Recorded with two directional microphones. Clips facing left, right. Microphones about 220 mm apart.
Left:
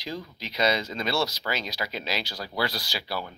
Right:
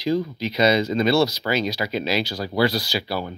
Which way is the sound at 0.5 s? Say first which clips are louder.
Right 7 dB; 10° right (ahead or behind).